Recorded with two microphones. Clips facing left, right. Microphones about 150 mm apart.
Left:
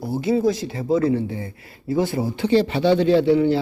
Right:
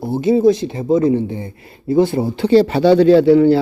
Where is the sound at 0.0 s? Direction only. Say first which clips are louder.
Right 7 dB; 25° right (ahead or behind).